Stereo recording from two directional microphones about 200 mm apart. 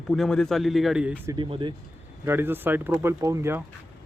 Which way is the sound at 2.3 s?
10° right (ahead or behind).